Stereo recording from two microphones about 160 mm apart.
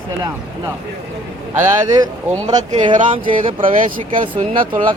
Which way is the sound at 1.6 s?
25° right (ahead or behind).